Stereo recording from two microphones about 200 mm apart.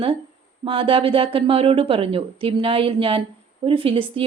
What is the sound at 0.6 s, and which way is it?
Speech, 25° right (ahead or behind).